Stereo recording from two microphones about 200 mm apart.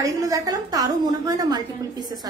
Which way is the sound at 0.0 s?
15° right (ahead or behind).